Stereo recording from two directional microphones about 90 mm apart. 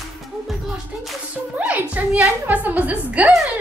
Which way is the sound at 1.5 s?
15° right (ahead or behind).